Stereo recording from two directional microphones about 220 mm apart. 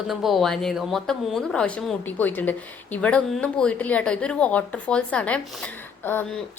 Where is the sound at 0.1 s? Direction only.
Centre (ahead or behind).